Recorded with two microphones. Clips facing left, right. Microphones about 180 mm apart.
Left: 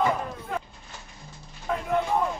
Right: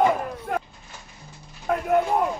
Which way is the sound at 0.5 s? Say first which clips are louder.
Right 5 dB; 60° right (ahead or behind).